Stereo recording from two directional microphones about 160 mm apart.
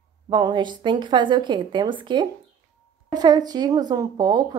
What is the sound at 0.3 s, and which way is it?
Speech, 30° right (ahead or behind).